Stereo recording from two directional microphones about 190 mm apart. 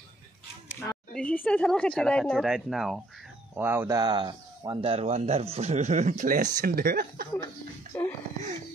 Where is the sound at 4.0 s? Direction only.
25° right (ahead or behind); by 7.2 s 50° right (ahead or behind).